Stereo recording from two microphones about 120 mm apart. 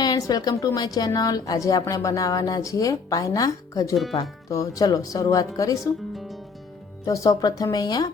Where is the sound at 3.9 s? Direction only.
Centre (ahead or behind).